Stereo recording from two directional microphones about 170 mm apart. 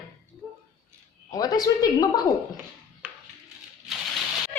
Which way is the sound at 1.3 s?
20° left (ahead or behind).